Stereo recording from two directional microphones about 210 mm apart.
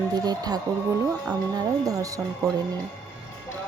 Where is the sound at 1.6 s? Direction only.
15° right (ahead or behind).